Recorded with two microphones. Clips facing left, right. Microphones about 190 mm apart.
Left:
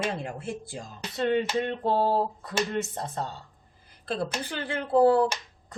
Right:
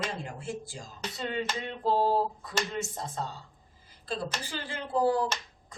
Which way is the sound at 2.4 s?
60° left (ahead or behind).